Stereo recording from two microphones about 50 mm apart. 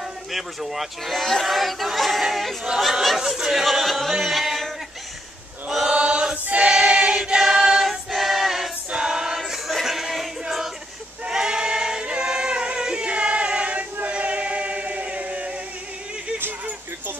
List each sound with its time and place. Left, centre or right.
0.3 s speech: centre
4.1 s music: centre
5.7 s choir: centre
6.3 s choir: right
6.7 s choir: centre
7.3 s choir: centre
9.5 s music: centre
11.2 s choir: centre